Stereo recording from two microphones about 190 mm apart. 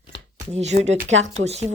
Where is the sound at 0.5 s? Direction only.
35° right (ahead or behind).